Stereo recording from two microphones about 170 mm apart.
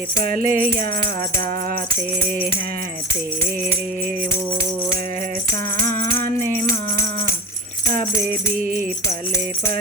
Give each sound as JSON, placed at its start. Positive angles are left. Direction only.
{"t": 0.2, "sound": "music", "side_deg": -55}
{"t": 5.8, "sound": "music", "side_deg": 15}